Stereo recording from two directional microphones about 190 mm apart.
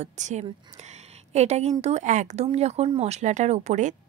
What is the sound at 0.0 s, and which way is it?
Speech, 40° right (ahead or behind).